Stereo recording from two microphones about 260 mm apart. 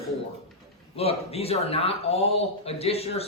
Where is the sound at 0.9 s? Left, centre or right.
Left.